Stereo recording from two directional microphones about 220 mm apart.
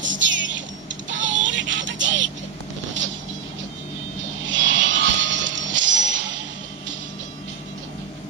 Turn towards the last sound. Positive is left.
turn(degrees=-55)  # may be behind; listen again after turning